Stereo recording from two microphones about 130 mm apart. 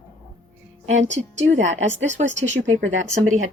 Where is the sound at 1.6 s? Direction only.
65° right (ahead or behind).